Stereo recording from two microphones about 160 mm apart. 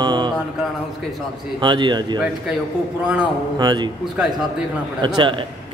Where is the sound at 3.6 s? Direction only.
25° right (ahead or behind).